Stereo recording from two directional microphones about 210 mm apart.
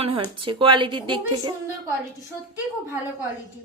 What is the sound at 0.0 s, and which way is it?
Speech, 25° right (ahead or behind).